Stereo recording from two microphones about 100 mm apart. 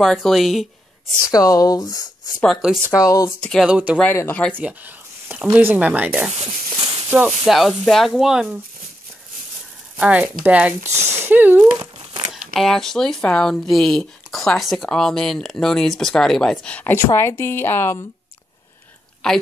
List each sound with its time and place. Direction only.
0.0 s speech: centre (ahead or behind)
1.2 s speech: 35° left (ahead or behind)
2.4 s speech: centre (ahead or behind)
2.9 s speech: 35° left (ahead or behind)
3.3 s a sound: 10° left (ahead or behind)
3.6 s speech: 10° right (ahead or behind)
4.3 s a sound: 10° left (ahead or behind)
4.6 s speech: 15° right (ahead or behind)
7.2 s speech: 5° right (ahead or behind)
9.9 s speech: 10° right (ahead or behind)
12.3 s speech: 5° left (ahead or behind)
16.6 s a woman's voice: 15° left (ahead or behind)
19.2 s speech: 5° left (ahead or behind)